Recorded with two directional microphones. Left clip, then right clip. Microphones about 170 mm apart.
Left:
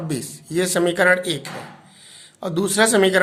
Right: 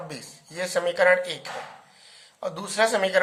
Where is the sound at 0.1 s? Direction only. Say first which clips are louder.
Left 13 dB; 30° left (ahead or behind).